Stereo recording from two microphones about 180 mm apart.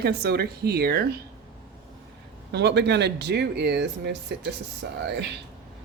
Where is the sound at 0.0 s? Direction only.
60° right (ahead or behind).